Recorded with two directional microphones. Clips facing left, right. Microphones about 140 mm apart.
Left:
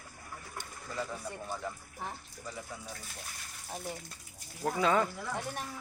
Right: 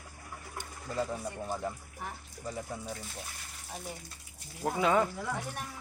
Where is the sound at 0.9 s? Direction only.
25° right (ahead or behind).